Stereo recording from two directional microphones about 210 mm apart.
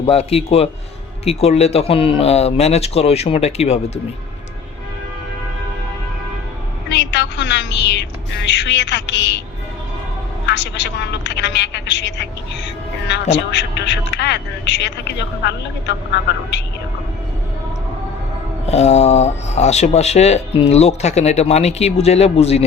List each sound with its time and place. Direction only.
0.0 s speech: 30° left (ahead or behind)
6.9 s music: 55° left (ahead or behind)
10.4 s speech: 55° left (ahead or behind)
13.3 s speech: 55° left (ahead or behind)
18.6 s speech: 30° left (ahead or behind)